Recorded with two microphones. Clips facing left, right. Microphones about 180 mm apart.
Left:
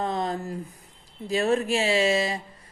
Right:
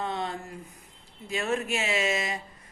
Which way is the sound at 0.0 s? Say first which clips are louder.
Left 5 dB; 40° left (ahead or behind).